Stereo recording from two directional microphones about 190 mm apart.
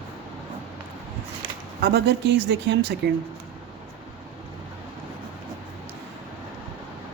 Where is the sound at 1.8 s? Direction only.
60° right (ahead or behind).